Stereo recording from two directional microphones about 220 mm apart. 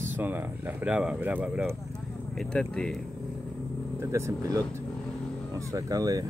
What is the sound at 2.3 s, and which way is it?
Speech, 5° left (ahead or behind).